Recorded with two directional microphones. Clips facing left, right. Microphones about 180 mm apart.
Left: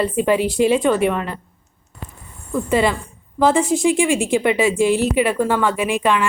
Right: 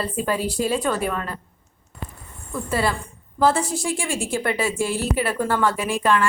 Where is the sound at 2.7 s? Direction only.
20° left (ahead or behind).